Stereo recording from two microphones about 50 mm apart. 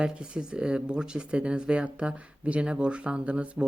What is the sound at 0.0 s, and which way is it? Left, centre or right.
Speech, centre.